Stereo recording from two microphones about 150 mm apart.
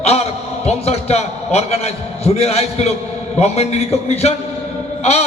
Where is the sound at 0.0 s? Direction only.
45° left (ahead or behind).